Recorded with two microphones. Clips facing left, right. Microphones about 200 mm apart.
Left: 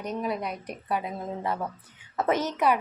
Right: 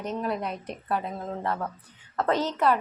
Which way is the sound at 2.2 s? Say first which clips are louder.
Even; 20° left (ahead or behind).